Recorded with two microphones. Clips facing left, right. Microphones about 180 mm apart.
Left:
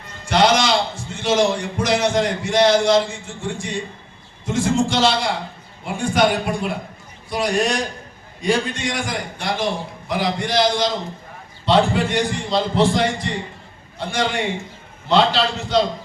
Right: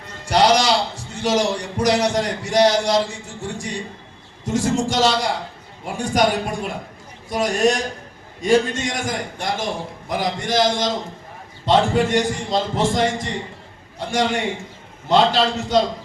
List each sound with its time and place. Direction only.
0.3 s a man's voice: 40° right (ahead or behind)